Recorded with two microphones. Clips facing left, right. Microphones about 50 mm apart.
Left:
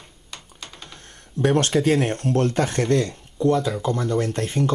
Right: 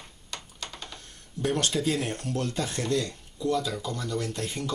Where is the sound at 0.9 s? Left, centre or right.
Left.